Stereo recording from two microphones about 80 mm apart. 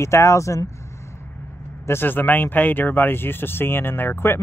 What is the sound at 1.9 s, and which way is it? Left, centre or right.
Speech, left.